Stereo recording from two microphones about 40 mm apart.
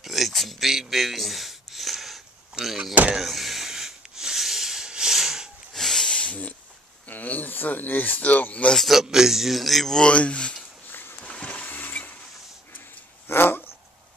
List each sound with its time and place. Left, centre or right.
0.0 s a sound: centre
2.6 s speech: centre
3.2 s a sound: centre
5.7 s snort: centre
6.0 s hiss: left
7.1 s speech: left
8.7 s a man's voice: centre
9.0 s a man's voice: centre
10.1 s speech: left
10.9 s a sound: left
11.2 s vehicle: left
11.6 s vehicle: left
13.3 s dog: left